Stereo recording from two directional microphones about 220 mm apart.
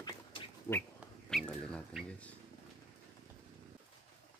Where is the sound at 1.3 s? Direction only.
5° left (ahead or behind).